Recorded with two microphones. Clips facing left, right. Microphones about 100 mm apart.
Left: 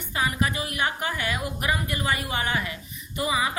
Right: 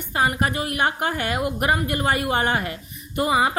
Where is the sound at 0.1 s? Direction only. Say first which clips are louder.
Right 4 dB; 50° right (ahead or behind).